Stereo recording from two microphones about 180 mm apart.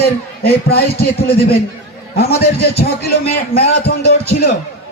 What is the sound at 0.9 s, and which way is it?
Speech, 60° left (ahead or behind).